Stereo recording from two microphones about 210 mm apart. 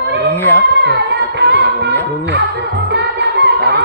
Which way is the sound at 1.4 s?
55° right (ahead or behind).